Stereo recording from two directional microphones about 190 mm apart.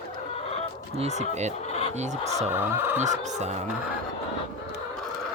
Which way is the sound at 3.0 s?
40° right (ahead or behind).